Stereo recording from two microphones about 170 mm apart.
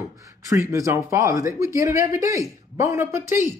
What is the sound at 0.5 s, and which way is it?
Speech, 20° right (ahead or behind).